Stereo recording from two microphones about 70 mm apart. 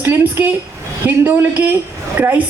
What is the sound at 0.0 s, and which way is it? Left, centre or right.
A woman's voice, right.